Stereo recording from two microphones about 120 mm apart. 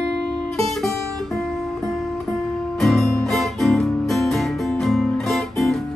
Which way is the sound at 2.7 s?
Centre (ahead or behind).